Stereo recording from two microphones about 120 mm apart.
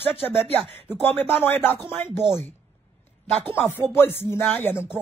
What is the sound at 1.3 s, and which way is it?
Speech, 15° left (ahead or behind).